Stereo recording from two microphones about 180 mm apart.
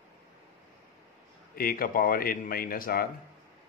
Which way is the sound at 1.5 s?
55° left (ahead or behind).